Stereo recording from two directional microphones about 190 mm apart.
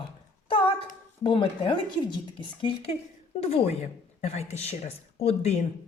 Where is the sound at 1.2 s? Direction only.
25° left (ahead or behind).